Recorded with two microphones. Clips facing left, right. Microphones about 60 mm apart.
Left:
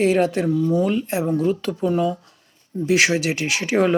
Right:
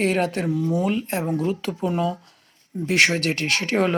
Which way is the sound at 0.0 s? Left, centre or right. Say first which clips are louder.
Left 4 dB; centre.